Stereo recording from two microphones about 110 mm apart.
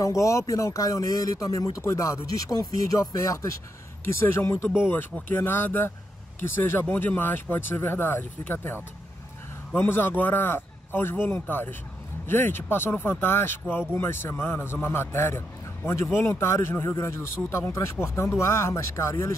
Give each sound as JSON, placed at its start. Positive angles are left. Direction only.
{"t": 0.0, "sound": "speech", "side_deg": 30}